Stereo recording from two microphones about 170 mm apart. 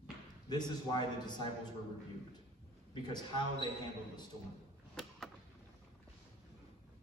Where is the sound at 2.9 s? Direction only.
25° left (ahead or behind).